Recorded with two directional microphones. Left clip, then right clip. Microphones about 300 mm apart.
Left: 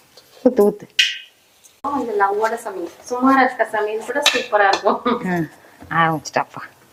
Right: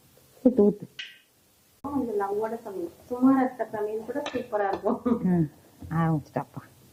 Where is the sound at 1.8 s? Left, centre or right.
Centre.